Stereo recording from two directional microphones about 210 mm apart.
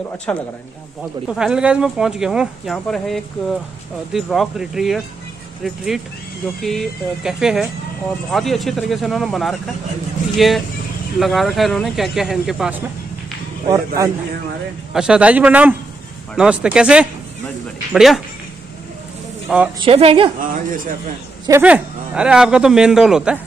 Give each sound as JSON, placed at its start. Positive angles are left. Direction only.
{"t": 0.3, "sound": "a man's voice", "side_deg": 5}
{"t": 6.6, "sound": "a man's voice", "side_deg": 0}
{"t": 13.7, "sound": "a man's voice", "side_deg": -15}
{"t": 14.9, "sound": "a man's voice", "side_deg": -5}
{"t": 19.8, "sound": "speech", "side_deg": -25}
{"t": 20.3, "sound": "speech", "side_deg": -40}
{"t": 21.5, "sound": "a man's voice", "side_deg": -10}